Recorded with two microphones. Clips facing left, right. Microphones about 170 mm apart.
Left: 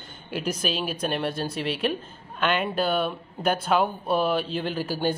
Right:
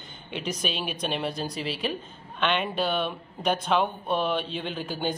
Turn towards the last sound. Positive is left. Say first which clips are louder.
# left 4 dB
turn(degrees=5)  # may be behind; listen again after turning